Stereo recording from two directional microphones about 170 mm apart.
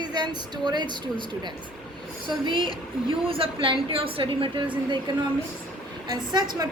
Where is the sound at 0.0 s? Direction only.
25° right (ahead or behind).